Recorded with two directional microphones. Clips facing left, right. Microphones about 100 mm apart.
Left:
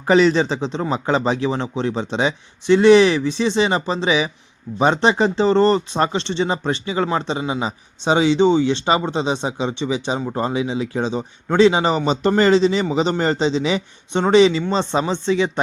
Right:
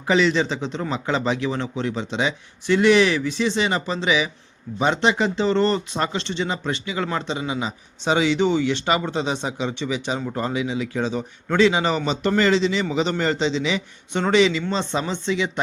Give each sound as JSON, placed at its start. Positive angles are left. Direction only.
{"t": 0.1, "sound": "speech", "side_deg": 40}